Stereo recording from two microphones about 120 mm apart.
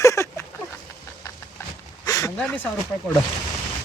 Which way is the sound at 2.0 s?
30° left (ahead or behind).